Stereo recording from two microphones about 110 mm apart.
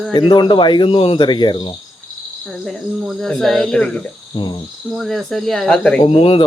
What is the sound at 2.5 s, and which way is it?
Speech, 5° left (ahead or behind).